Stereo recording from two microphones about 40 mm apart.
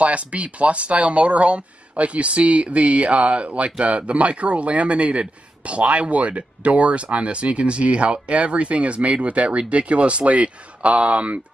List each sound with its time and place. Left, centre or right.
0.0 s a man's voice: right